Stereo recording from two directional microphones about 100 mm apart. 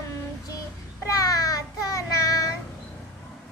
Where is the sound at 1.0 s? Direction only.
35° left (ahead or behind).